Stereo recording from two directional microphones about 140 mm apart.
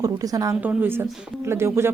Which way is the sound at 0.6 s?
15° right (ahead or behind).